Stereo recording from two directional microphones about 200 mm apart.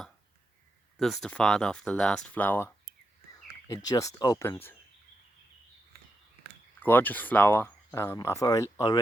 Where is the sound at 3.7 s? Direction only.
20° left (ahead or behind).